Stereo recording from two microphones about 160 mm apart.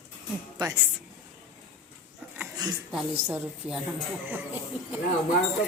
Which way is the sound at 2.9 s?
10° right (ahead or behind).